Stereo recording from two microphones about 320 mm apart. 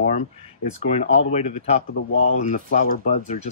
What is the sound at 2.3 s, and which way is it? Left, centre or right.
Speech, left.